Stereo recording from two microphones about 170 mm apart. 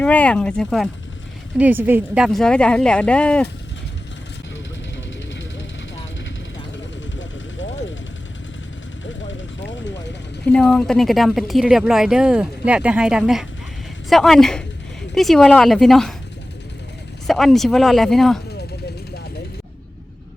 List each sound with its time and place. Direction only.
0.0 s speech: 5° left (ahead or behind)
1.5 s a woman's voice: 10° right (ahead or behind); by 3.4 s 5° left (ahead or behind)
7.2 s vehicle: 90° left
10.4 s a woman's voice: 5° left (ahead or behind)
17.2 s a woman's voice: centre (ahead or behind)